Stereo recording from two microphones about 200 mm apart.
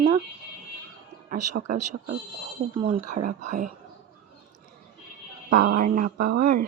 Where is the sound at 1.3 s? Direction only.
40° right (ahead or behind).